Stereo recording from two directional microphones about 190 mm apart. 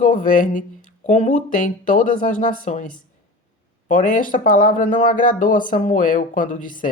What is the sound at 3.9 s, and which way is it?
Speech, 45° left (ahead or behind).